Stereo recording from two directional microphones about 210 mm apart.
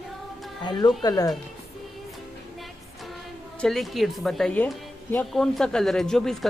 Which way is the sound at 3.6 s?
Centre (ahead or behind).